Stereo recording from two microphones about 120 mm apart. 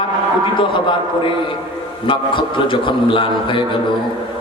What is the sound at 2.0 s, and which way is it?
Mantra, 45° left (ahead or behind).